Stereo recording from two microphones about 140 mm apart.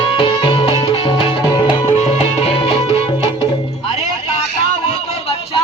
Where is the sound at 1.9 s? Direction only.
55° left (ahead or behind).